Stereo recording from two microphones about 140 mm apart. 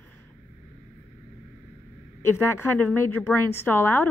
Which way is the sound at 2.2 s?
15° left (ahead or behind).